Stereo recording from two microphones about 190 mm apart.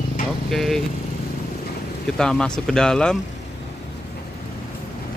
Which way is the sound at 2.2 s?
5° left (ahead or behind).